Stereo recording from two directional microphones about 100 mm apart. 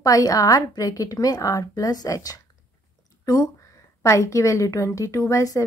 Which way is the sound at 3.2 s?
40° left (ahead or behind).